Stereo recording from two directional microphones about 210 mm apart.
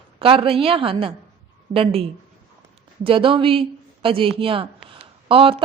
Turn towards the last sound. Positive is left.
turn(degrees=-25)  # may be behind; listen again after turning